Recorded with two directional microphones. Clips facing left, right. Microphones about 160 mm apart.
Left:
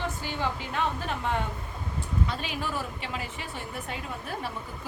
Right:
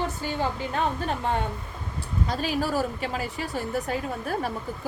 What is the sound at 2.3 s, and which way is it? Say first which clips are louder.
A woman's voice: right 6 dB; 40° right (ahead or behind).